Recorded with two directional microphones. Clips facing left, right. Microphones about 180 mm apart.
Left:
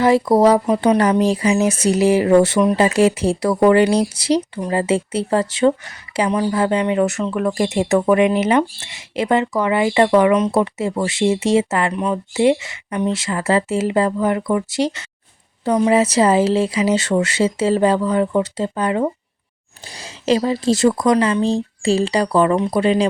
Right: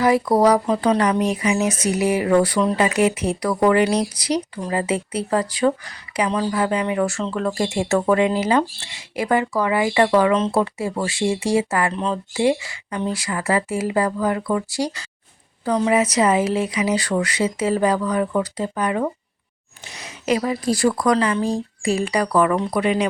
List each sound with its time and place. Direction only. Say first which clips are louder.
0.0 s speech: left 3 dB; 25° left (ahead or behind)
11.9 s speech: left 3 dB; 10° left (ahead or behind)
12.3 s speech: left 4 dB; 20° left (ahead or behind)